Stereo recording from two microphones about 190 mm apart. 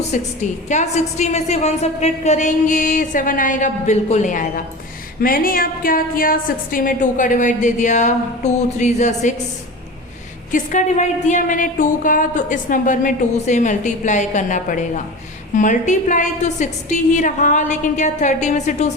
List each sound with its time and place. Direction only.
0.1 s a woman's voice: 40° left (ahead or behind)
10.5 s a woman's voice: 40° left (ahead or behind)